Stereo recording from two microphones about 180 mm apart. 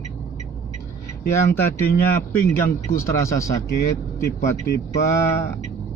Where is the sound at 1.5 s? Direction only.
10° left (ahead or behind).